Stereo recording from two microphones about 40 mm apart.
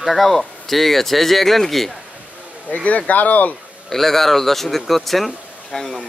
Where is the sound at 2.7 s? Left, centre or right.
Left.